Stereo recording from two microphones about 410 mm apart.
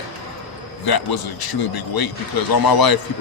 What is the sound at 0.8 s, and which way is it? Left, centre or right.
A man's voice, left.